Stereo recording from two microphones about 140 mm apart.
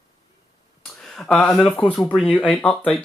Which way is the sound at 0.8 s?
Centre (ahead or behind).